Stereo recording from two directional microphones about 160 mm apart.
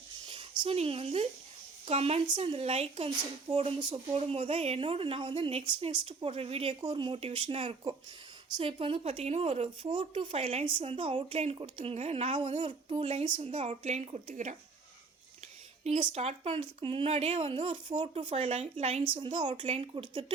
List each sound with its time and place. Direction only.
0.3 s a woman's voice: 30° right (ahead or behind)
12.5 s speech: 45° right (ahead or behind)
15.8 s speech: 35° right (ahead or behind)
19.4 s speech: 30° right (ahead or behind)
19.9 s speech: 30° right (ahead or behind)